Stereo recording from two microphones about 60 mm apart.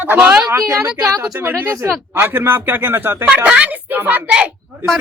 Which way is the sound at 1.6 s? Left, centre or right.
Right.